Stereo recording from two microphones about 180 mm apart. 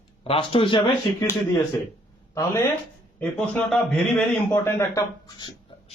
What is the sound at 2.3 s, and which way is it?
A man's voice, 15° left (ahead or behind).